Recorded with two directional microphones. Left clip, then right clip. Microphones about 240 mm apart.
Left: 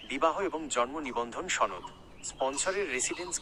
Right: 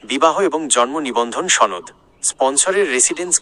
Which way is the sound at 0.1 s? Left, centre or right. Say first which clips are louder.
Right 14 dB; right.